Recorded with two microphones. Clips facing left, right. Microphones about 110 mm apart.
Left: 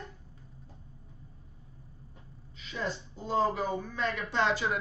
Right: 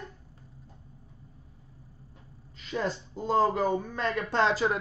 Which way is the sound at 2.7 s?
50° right (ahead or behind).